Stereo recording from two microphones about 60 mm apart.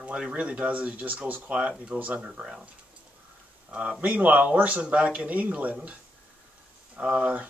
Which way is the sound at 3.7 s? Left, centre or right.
Centre.